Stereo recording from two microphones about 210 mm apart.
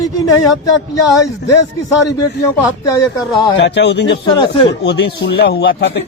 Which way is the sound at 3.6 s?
55° left (ahead or behind).